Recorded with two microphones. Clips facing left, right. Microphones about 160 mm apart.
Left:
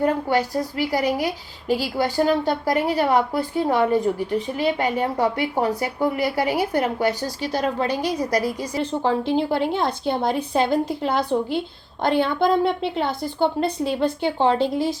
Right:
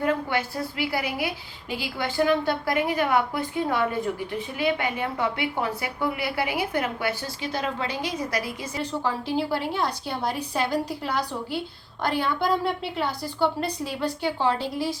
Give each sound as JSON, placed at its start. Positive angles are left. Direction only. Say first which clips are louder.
{"t": 0.0, "sound": "a woman's voice", "louder": "left 5 dB", "side_deg": 40}
{"t": 8.8, "sound": "a woman's voice", "louder": "left 6 dB", "side_deg": 25}